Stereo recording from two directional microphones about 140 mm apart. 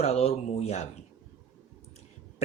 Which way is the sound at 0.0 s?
45° left (ahead or behind).